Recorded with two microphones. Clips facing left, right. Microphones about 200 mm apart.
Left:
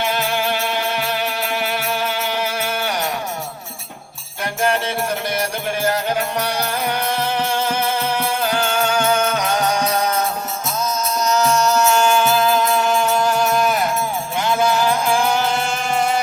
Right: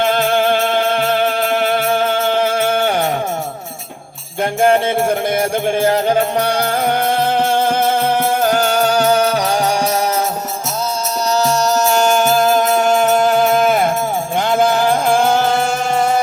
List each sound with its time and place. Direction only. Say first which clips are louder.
0.0 s music: right 7 dB; 55° right (ahead or behind)
4.6 s music: right 7 dB; 50° right (ahead or behind); by 9.4 s 35° right (ahead or behind)
11.3 s music: right 2 dB; 35° right (ahead or behind); by 15.6 s 55° right (ahead or behind)